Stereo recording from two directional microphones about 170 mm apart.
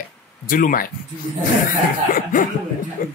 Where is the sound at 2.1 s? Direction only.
55° left (ahead or behind).